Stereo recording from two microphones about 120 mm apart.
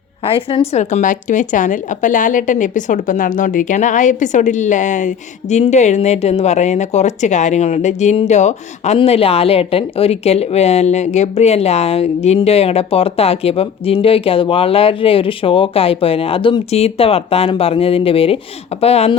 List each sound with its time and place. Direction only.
0.3 s a woman's voice: 50° left (ahead or behind); by 9.0 s 70° left (ahead or behind)
9.0 s speech: 55° left (ahead or behind)